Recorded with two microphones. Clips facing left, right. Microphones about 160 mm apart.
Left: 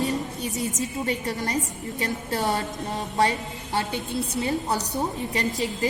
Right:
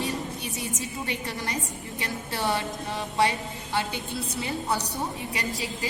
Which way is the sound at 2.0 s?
45° left (ahead or behind).